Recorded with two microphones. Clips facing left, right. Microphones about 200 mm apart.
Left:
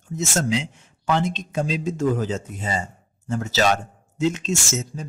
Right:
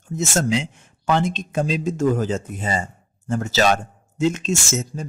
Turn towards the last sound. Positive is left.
turn(degrees=-50)  # may be behind; listen again after turning